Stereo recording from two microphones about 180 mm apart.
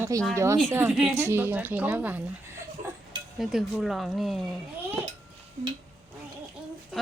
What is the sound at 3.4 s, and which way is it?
Speech, centre (ahead or behind).